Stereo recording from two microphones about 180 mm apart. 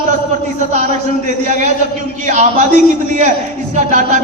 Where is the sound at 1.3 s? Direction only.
40° right (ahead or behind).